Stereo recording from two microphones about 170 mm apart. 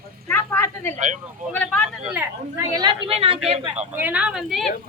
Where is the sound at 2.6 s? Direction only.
20° right (ahead or behind); by 3.9 s 40° right (ahead or behind).